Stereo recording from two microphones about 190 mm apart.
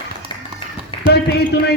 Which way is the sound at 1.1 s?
60° left (ahead or behind).